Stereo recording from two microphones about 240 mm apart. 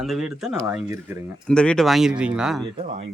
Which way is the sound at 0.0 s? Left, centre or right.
Centre.